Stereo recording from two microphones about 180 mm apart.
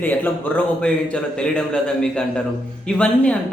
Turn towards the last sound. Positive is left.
turn(degrees=5)  # may be behind; listen again after turning